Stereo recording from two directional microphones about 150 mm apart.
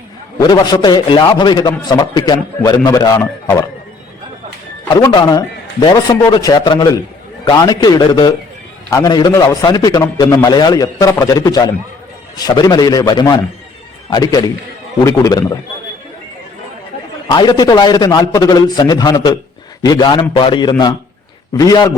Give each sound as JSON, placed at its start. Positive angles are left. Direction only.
{"t": 0.3, "sound": "a man's voice", "side_deg": 25}
{"t": 2.6, "sound": "a man's voice", "side_deg": 20}
{"t": 5.0, "sound": "a man's voice", "side_deg": 25}
{"t": 17.2, "sound": "a man's voice", "side_deg": 30}